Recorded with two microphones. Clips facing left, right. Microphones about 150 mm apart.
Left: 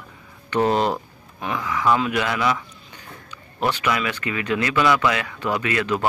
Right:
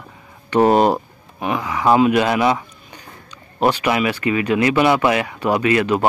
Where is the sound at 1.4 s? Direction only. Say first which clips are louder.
Right 4 dB; 15° right (ahead or behind).